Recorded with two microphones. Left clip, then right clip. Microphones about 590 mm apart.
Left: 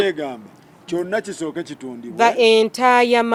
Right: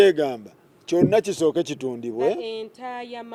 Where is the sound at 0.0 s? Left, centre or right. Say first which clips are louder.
Right 4 dB; right.